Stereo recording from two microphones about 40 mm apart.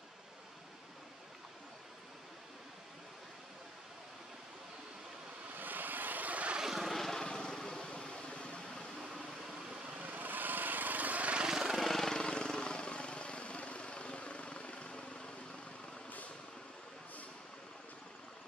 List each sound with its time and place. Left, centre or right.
5.5 s vehicle: right
6.6 s vehicle: centre
6.9 s vehicle: centre
7.2 s vehicle: centre
9.9 s vehicle: right
11.4 s vehicle: centre
11.7 s vehicle: centre
12.2 s vehicle: left